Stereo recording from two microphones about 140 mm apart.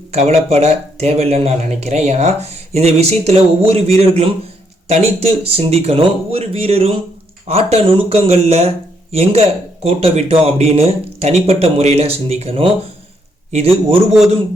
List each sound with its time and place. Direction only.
0.1 s speech: 50° right (ahead or behind)